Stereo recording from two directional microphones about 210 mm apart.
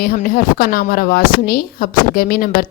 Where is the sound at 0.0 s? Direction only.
45° left (ahead or behind).